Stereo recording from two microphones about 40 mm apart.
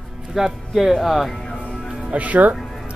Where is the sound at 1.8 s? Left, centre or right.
Centre.